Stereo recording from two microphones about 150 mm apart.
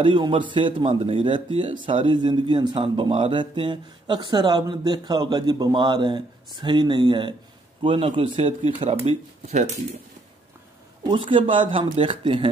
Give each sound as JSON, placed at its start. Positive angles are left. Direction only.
{"t": 0.0, "sound": "speech", "side_deg": -35}
{"t": 11.1, "sound": "speech", "side_deg": -35}